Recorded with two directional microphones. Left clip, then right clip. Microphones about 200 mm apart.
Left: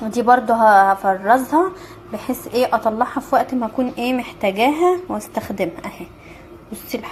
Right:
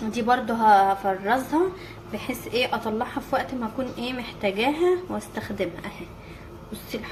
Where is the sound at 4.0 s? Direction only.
30° left (ahead or behind).